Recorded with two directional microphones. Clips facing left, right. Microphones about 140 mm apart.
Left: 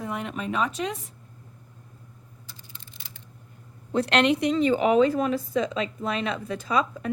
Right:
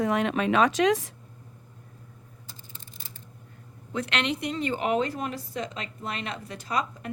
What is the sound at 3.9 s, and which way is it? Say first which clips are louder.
Speech: left 7 dB; 35° left (ahead or behind).